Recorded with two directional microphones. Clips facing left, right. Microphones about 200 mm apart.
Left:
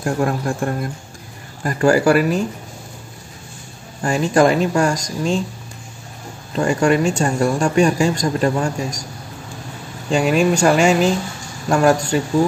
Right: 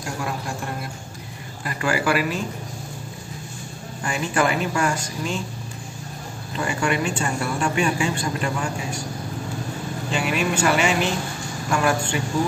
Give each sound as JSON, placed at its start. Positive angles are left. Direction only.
{"t": 0.0, "sound": "speech", "side_deg": 50}
{"t": 1.6, "sound": "speech", "side_deg": 40}
{"t": 4.0, "sound": "speech", "side_deg": 40}
{"t": 6.5, "sound": "speech", "side_deg": 40}
{"t": 10.1, "sound": "speech", "side_deg": 40}